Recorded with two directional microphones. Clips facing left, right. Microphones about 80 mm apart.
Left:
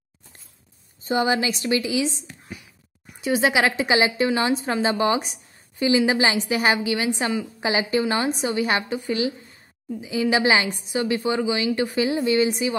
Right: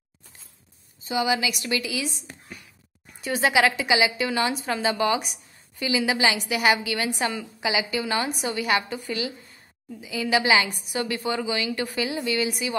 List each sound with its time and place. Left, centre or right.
1.0 s a woman's voice: left
3.1 s a sound: centre
3.5 s a woman's voice: left
7.6 s a woman's voice: left